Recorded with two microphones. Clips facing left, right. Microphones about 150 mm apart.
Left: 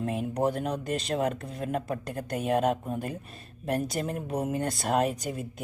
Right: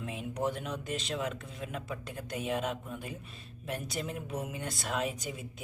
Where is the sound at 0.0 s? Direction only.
45° left (ahead or behind).